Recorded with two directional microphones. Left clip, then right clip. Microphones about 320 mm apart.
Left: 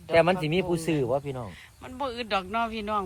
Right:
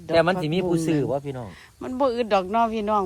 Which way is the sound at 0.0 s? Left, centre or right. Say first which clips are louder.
Right 2 dB; right.